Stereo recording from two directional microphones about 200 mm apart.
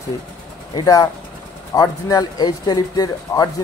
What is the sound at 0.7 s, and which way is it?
A man's voice, 15° left (ahead or behind).